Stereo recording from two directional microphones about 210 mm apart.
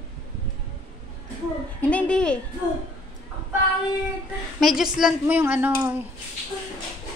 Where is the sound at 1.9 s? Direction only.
5° left (ahead or behind).